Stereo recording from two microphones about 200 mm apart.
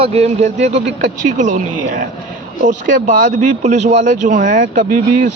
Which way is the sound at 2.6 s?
40° right (ahead or behind).